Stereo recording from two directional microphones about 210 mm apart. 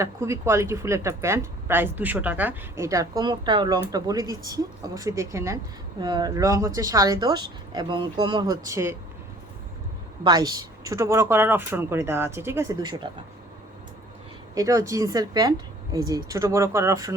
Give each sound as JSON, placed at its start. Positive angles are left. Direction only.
{"t": 0.0, "sound": "a woman's voice", "side_deg": -15}
{"t": 10.2, "sound": "a woman's voice", "side_deg": -20}
{"t": 14.5, "sound": "a woman's voice", "side_deg": -15}